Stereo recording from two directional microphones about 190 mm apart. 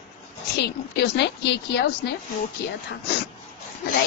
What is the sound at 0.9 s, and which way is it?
A woman's voice, 60° left (ahead or behind).